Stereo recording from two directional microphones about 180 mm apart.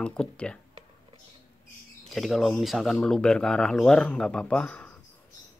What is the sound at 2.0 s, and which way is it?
Speech, centre (ahead or behind).